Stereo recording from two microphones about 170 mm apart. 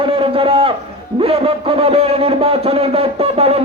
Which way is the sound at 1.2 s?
35° right (ahead or behind).